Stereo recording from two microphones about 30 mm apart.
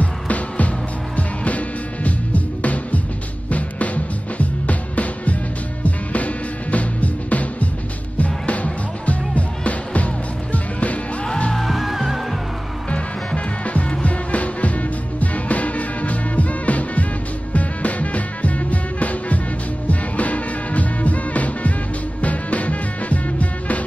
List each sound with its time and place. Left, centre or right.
0.0 s music: left
9.0 s music: left
11.7 s music: centre
14.0 s music: left